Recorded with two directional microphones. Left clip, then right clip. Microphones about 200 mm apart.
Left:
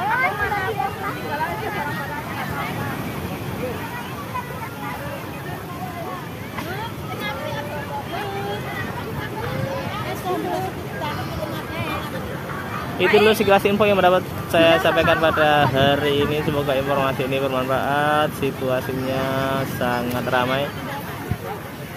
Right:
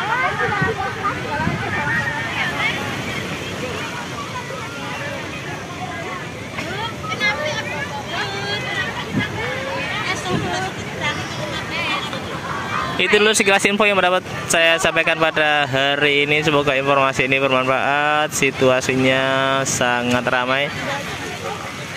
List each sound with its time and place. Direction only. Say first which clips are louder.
13.2 s speech: even; 15° right (ahead or behind)